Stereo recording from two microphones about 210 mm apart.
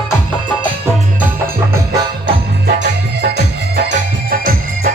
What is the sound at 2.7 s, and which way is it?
Music, 55° right (ahead or behind).